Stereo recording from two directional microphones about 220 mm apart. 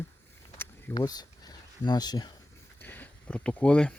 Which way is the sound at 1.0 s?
15° left (ahead or behind).